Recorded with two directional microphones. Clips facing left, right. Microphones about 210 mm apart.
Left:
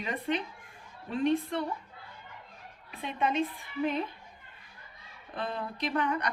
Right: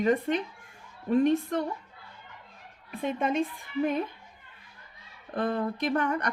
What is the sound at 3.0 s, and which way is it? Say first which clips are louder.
Speech: right 3 dB; 45° right (ahead or behind).